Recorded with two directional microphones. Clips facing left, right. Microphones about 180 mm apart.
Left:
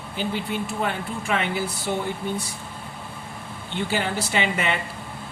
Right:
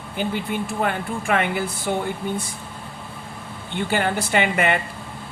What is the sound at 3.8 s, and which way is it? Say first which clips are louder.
Speech: right 4 dB; 55° right (ahead or behind).